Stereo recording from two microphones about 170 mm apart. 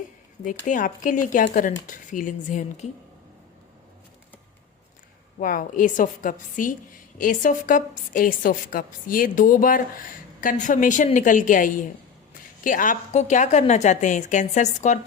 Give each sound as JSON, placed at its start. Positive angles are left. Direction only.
{"t": 0.4, "sound": "a woman's voice", "side_deg": 50}
{"t": 5.4, "sound": "a woman's voice", "side_deg": 50}